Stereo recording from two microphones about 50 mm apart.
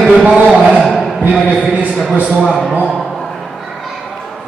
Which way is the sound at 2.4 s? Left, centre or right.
Centre.